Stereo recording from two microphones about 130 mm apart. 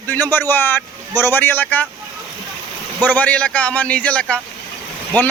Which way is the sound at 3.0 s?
10° left (ahead or behind).